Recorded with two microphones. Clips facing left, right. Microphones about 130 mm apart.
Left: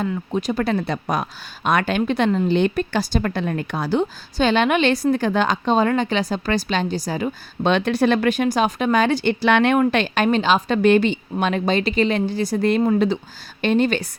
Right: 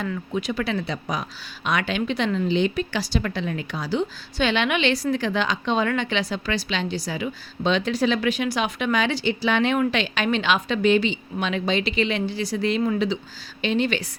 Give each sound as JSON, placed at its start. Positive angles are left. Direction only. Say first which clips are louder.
{"t": 0.3, "sound": "speech", "louder": "left 4 dB", "side_deg": 45}
{"t": 7.6, "sound": "speech", "louder": "left 4 dB", "side_deg": 60}
{"t": 9.8, "sound": "speech", "louder": "left 5 dB", "side_deg": 50}
{"t": 10.2, "sound": "a woman's voice", "louder": "left 3 dB", "side_deg": 35}
{"t": 10.8, "sound": "speech", "louder": "left 3 dB", "side_deg": 55}